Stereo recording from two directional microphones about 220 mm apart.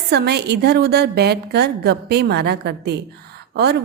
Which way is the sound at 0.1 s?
50° right (ahead or behind).